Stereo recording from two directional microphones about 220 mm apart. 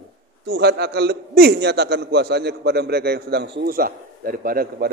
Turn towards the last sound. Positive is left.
turn(degrees=-40)  # may be behind; listen again after turning